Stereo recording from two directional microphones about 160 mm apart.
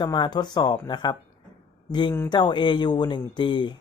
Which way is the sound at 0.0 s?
25° left (ahead or behind).